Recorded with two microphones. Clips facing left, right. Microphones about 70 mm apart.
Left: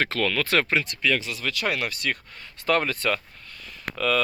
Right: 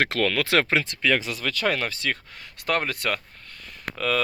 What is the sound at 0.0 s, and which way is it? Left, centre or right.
Speech, right.